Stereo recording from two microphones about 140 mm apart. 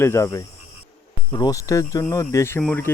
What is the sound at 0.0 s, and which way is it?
Speech, 20° left (ahead or behind).